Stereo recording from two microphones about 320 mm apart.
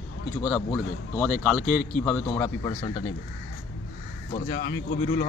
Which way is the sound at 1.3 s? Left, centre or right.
Centre.